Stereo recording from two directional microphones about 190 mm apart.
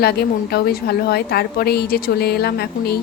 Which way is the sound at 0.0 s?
55° left (ahead or behind).